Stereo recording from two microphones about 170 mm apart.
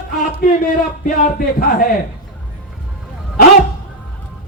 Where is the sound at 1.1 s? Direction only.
55° left (ahead or behind).